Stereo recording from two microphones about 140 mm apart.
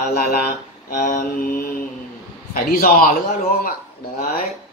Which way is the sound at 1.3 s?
90° left.